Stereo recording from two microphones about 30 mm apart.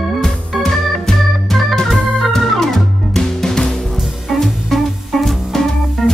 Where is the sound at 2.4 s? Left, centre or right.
Centre.